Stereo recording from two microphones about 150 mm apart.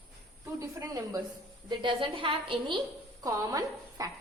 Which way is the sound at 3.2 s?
20° right (ahead or behind).